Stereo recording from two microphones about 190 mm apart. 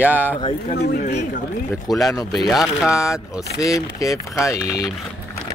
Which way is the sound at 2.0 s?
20° left (ahead or behind).